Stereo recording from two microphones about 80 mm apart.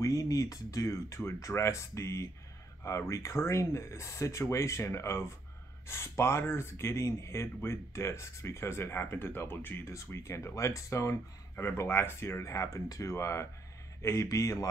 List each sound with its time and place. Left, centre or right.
0.0 s speech: left